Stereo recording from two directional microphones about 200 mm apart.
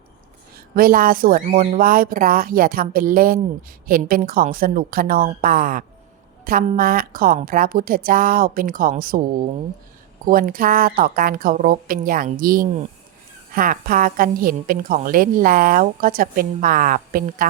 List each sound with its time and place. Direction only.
0.8 s a woman's voice: 45° right (ahead or behind)
10.2 s a woman's voice: 45° right (ahead or behind)